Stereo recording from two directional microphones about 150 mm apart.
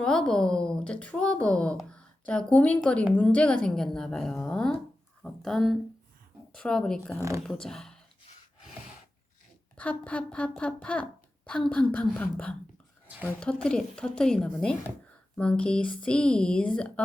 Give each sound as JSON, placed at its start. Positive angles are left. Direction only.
{"t": 0.0, "sound": "a woman's voice", "side_deg": 5}
{"t": 7.2, "sound": "speech", "side_deg": -20}
{"t": 7.4, "sound": "a woman's voice", "side_deg": 5}
{"t": 9.7, "sound": "a woman's voice", "side_deg": 10}
{"t": 13.1, "sound": "a woman's voice", "side_deg": -10}
{"t": 13.4, "sound": "a woman's voice", "side_deg": 5}